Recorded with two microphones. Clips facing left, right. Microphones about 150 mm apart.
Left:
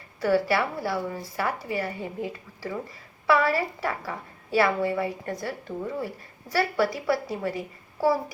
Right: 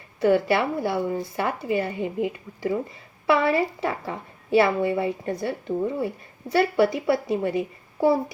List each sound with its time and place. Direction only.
0.2 s a woman's voice: 20° right (ahead or behind)